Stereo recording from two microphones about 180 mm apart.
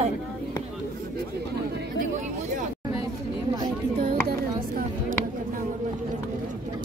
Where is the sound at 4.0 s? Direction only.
55° right (ahead or behind).